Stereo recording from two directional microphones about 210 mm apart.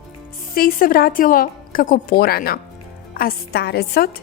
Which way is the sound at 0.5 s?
45° left (ahead or behind).